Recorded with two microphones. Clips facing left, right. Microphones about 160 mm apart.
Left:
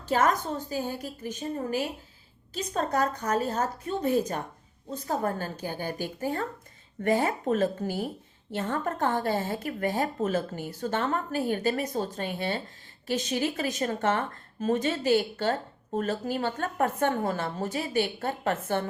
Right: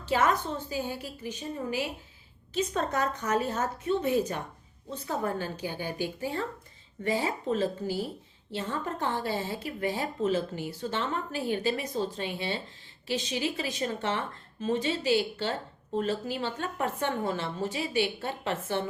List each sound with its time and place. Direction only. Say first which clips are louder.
0.0 s a woman's voice: left 1 dB; 45° left (ahead or behind)